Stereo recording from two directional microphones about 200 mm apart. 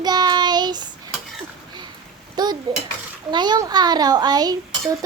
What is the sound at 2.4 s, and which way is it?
A child's voice, 20° right (ahead or behind).